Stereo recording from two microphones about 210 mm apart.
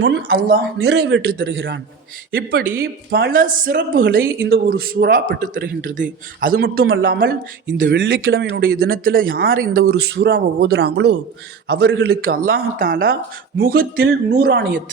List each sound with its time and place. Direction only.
0.0 s speech: 50° right (ahead or behind)
2.3 s speech: 45° right (ahead or behind)